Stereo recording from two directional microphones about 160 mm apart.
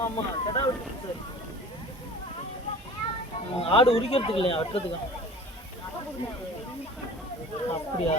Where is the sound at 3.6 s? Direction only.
35° left (ahead or behind).